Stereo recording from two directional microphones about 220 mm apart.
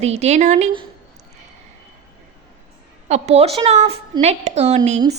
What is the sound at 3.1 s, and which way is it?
A woman's voice, 30° right (ahead or behind).